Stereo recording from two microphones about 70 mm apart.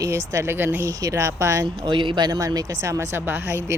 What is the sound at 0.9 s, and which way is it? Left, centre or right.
Speech, right.